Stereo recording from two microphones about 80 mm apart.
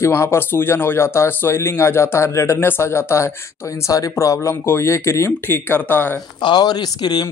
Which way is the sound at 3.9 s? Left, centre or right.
Left.